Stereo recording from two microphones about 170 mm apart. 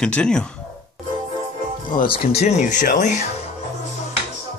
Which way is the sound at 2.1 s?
40° left (ahead or behind).